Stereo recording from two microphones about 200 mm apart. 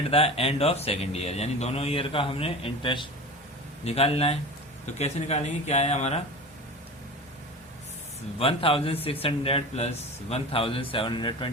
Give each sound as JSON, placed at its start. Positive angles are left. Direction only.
{"t": 0.1, "sound": "a man's voice", "side_deg": 30}
{"t": 8.4, "sound": "a man's voice", "side_deg": 25}